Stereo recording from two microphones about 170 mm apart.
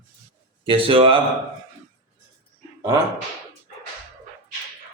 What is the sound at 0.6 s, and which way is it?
Speech, 30° right (ahead or behind).